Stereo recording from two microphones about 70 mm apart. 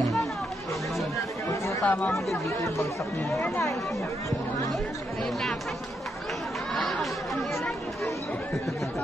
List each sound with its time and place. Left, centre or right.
1.5 s chatter: left
1.9 s speech: left
2.4 s speech: left
5.2 s speech: centre
6.7 s chatter: centre